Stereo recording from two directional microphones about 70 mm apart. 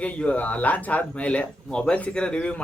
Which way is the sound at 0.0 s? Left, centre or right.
Centre.